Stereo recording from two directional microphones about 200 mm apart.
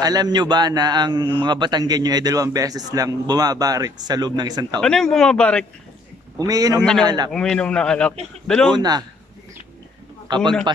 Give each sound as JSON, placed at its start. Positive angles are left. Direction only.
{"t": 0.0, "sound": "a man's voice", "side_deg": -20}
{"t": 4.7, "sound": "a man's voice", "side_deg": 5}
{"t": 6.3, "sound": "speech", "side_deg": -20}
{"t": 6.8, "sound": "a man's voice", "side_deg": 5}
{"t": 8.7, "sound": "a man's voice", "side_deg": -20}
{"t": 10.2, "sound": "a man's voice", "side_deg": -20}